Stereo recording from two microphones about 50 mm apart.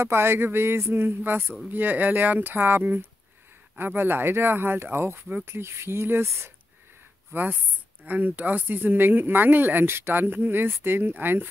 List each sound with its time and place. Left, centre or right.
0.0 s speech: right
7.3 s speech: right